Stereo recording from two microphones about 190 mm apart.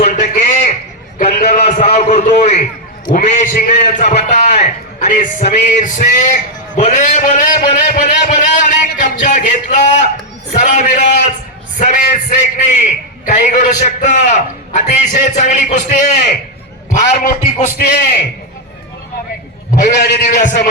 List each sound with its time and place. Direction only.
0.0 s a sound: 40° left (ahead or behind)
3.1 s a man's voice: 40° left (ahead or behind)
17.7 s a man's voice: 50° left (ahead or behind)
19.8 s a man's voice: 60° left (ahead or behind)
20.2 s a man's voice: 45° left (ahead or behind)